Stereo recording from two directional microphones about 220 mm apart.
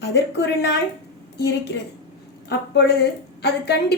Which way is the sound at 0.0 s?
50° left (ahead or behind).